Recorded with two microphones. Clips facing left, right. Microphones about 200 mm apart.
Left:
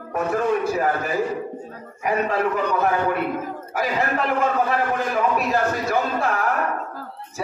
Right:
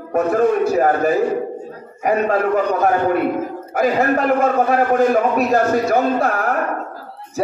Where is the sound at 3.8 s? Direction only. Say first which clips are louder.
Right 7 dB; 45° right (ahead or behind).